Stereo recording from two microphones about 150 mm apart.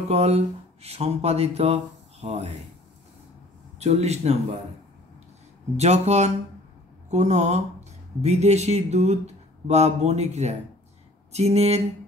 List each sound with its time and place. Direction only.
0.1 s speech: 45° right (ahead or behind)
3.8 s speech: 45° right (ahead or behind)
5.8 s speech: 50° right (ahead or behind)